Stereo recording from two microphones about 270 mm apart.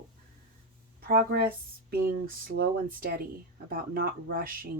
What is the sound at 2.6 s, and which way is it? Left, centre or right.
Speech, right.